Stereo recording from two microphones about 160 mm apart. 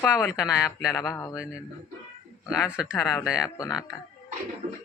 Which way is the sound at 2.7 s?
5° right (ahead or behind).